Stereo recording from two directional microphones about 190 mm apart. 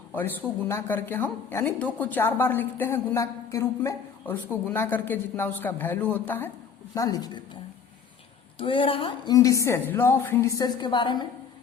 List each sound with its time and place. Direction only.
0.1 s a woman's voice: 10° left (ahead or behind)